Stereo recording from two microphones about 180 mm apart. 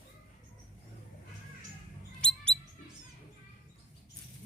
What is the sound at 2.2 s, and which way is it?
Rodents, 5° left (ahead or behind).